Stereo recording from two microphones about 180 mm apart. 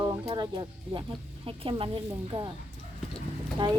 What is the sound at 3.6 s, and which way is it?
Speech, 25° right (ahead or behind).